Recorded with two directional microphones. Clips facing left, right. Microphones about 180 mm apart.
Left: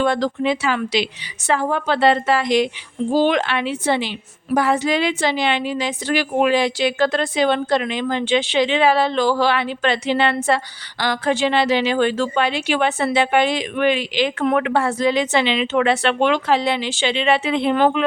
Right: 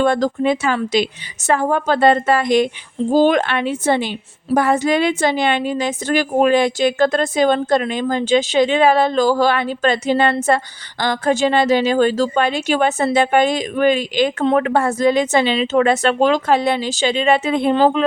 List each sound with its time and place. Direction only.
0.0 s a woman's voice: 45° right (ahead or behind)
14.4 s speech: 30° right (ahead or behind)
14.7 s a woman's voice: 45° right (ahead or behind)
17.7 s speech: 30° right (ahead or behind)